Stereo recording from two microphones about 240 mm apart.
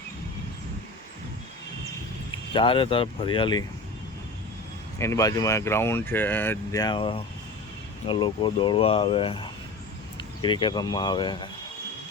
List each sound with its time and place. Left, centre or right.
2.5 s speech: left
4.9 s speech: centre